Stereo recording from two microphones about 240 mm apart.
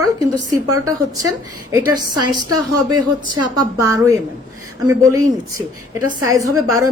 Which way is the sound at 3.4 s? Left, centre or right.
Centre.